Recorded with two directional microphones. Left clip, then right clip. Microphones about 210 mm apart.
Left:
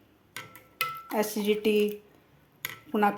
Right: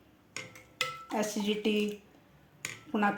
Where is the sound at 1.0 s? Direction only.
20° left (ahead or behind).